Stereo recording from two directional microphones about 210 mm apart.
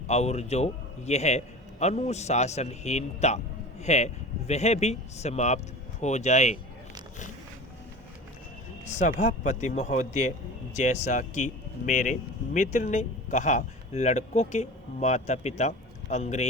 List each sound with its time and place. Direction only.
0.1 s speech: 30° left (ahead or behind)
9.0 s speech: 35° left (ahead or behind)